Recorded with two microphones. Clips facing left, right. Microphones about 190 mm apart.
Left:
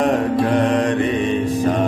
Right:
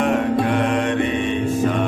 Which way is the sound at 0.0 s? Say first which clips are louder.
Left 1 dB; 35° left (ahead or behind).